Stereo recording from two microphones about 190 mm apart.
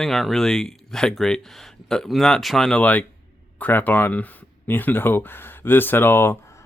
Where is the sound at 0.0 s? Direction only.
Centre (ahead or behind).